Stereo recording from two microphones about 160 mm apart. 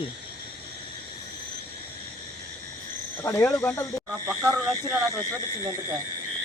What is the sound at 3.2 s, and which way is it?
Speech, 15° left (ahead or behind).